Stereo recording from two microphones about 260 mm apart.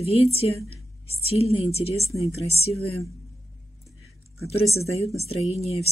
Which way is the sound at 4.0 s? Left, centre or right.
Left.